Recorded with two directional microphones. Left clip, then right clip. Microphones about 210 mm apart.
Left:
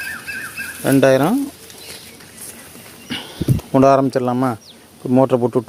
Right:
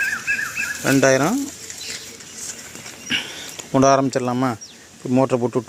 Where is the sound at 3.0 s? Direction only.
15° left (ahead or behind).